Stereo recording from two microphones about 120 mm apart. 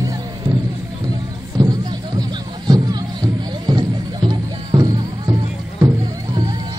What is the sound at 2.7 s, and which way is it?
Music, 35° right (ahead or behind).